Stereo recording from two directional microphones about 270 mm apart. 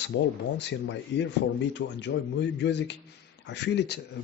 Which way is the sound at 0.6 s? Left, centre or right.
Left.